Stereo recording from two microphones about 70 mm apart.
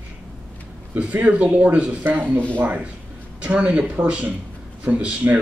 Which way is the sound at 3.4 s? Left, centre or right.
Centre.